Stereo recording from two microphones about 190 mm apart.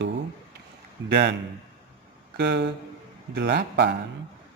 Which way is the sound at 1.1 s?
60° right (ahead or behind).